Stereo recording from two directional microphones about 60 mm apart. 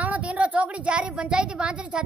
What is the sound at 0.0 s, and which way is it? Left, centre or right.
A woman's voice, right.